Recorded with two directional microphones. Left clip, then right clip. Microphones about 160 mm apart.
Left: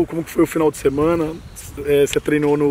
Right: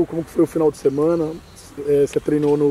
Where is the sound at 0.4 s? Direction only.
35° left (ahead or behind).